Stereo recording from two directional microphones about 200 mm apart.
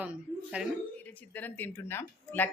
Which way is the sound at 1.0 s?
10° left (ahead or behind).